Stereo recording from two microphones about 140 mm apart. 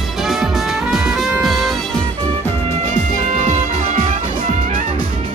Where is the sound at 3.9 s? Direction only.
50° right (ahead or behind).